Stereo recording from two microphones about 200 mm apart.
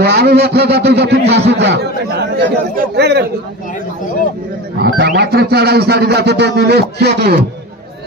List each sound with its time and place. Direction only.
0.0 s speech: 50° right (ahead or behind)
4.8 s speech: 55° right (ahead or behind)